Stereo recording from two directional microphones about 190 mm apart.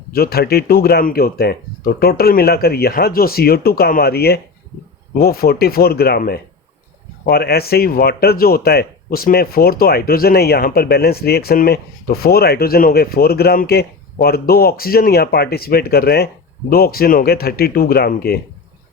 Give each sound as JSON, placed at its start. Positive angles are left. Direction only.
{"t": 0.1, "sound": "speech", "side_deg": 55}